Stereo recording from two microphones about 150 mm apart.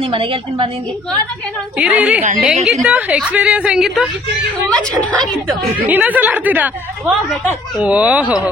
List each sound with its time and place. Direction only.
0.0 s a woman's voice: 35° right (ahead or behind)
1.8 s a woman's voice: 10° right (ahead or behind)
5.8 s a woman's voice: 10° right (ahead or behind)